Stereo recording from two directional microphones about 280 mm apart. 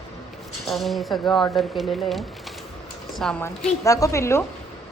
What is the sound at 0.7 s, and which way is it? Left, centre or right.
A woman's voice, centre.